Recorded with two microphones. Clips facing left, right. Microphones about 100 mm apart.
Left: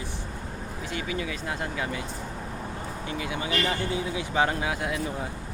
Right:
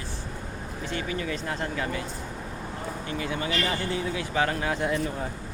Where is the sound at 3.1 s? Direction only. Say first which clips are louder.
Even; 10° left (ahead or behind).